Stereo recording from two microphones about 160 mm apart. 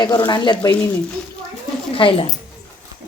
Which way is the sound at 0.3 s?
30° left (ahead or behind).